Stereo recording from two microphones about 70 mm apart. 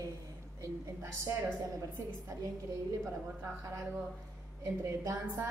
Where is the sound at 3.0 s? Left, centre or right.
Right.